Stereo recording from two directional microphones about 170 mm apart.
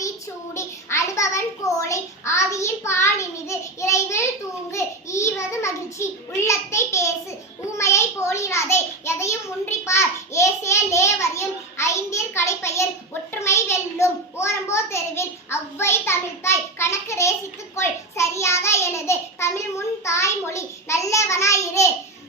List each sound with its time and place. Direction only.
0.5 s child singing: 15° left (ahead or behind)
13.3 s a sound: 15° left (ahead or behind)
17.7 s child singing: 15° left (ahead or behind)